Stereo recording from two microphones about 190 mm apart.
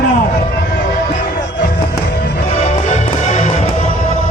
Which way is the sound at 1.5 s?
55° left (ahead or behind).